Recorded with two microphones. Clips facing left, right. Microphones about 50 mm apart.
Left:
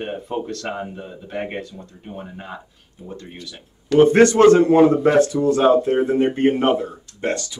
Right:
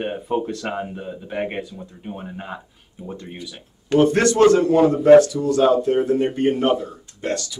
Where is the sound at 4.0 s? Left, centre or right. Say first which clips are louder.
Left 3 dB; left.